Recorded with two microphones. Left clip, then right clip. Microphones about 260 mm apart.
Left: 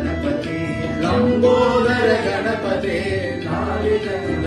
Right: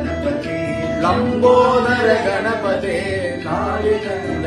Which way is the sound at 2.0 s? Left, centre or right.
Right.